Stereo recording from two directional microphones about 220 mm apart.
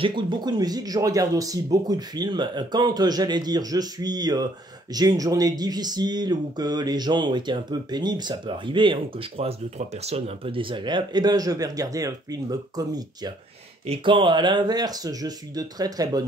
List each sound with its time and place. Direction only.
0.0 s speech: 20° right (ahead or behind)